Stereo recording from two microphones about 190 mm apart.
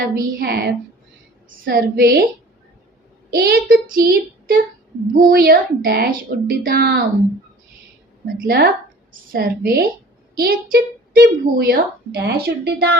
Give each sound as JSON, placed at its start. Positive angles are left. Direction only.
{"t": 0.0, "sound": "a woman's voice", "side_deg": -55}
{"t": 3.3, "sound": "a woman's voice", "side_deg": -50}
{"t": 8.4, "sound": "a woman's voice", "side_deg": -55}